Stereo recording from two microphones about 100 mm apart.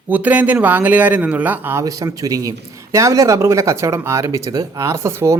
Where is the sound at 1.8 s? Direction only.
35° right (ahead or behind).